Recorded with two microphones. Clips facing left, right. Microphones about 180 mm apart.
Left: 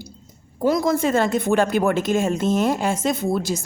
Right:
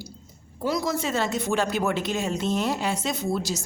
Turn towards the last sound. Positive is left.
turn(degrees=55)  # may be behind; listen again after turning